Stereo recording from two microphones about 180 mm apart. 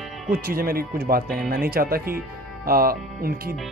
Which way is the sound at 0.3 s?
55° right (ahead or behind).